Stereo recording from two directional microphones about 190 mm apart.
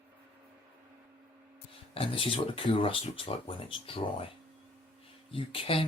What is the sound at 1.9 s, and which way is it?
Speech, 30° left (ahead or behind).